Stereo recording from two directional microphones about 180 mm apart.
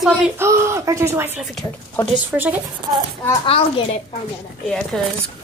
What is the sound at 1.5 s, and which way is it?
Speech, 5° left (ahead or behind).